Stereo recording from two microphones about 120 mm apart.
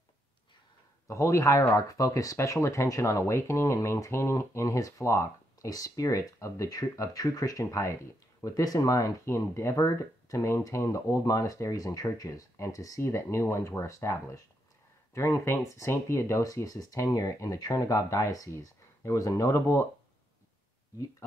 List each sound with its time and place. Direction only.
1.0 s speech: 25° left (ahead or behind)